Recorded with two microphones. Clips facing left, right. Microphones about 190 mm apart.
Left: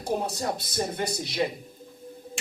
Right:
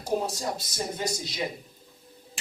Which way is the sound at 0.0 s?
60° left (ahead or behind).